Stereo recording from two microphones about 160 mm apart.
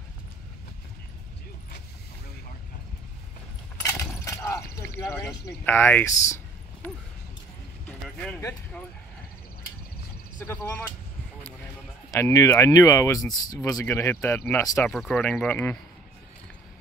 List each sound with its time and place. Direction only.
4.2 s a sound: 15° left (ahead or behind)
8.4 s speech: 15° left (ahead or behind)
10.4 s speech: 15° left (ahead or behind)
12.1 s speech: 20° left (ahead or behind)
14.9 s speech: centre (ahead or behind)